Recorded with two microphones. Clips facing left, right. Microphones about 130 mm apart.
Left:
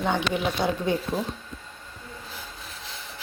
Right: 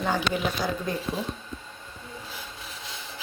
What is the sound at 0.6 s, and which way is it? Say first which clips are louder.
Speech: left 3 dB; 25° left (ahead or behind).